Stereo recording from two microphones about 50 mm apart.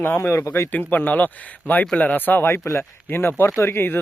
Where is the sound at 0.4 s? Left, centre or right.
Left.